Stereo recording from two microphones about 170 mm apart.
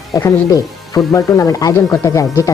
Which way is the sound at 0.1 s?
15° left (ahead or behind).